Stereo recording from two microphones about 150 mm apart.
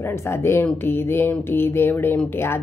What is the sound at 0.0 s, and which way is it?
Speech, 15° left (ahead or behind).